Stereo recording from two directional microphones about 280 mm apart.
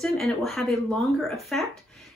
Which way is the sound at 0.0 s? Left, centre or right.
Centre.